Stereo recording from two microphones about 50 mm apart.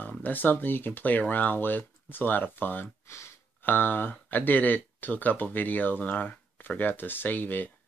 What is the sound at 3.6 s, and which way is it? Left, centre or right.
Speech, left.